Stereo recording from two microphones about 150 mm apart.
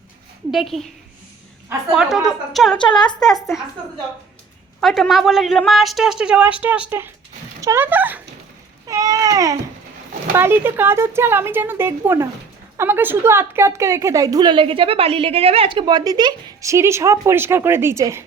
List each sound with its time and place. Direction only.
0.5 s speech: centre (ahead or behind)
1.9 s speech: centre (ahead or behind)
2.7 s speech: 30° left (ahead or behind)
4.8 s speech: centre (ahead or behind)
8.9 s baby cry: 25° right (ahead or behind)
10.3 s a woman's voice: 15° right (ahead or behind)